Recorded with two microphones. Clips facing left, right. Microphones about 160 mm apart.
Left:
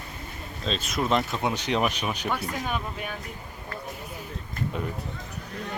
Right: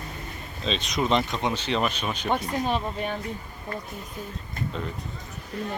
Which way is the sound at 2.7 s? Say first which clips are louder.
Right 4 dB; 30° right (ahead or behind).